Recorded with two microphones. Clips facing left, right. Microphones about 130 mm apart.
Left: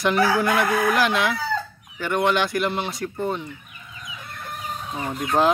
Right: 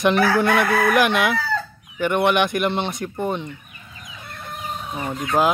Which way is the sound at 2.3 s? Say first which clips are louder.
Right 3 dB; 20° right (ahead or behind).